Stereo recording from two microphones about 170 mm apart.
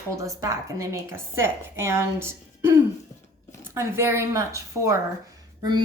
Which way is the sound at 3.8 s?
15° right (ahead or behind).